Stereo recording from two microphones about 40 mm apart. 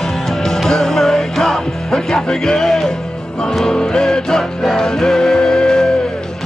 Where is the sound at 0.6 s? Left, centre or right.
Centre.